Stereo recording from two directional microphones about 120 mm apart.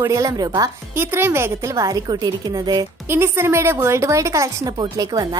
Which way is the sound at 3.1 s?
20° right (ahead or behind).